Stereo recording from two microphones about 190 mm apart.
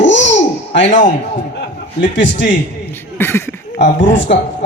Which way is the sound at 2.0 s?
70° left (ahead or behind).